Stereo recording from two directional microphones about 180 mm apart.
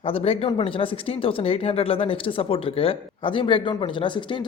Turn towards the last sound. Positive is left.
turn(degrees=25)  # may be behind; listen again after turning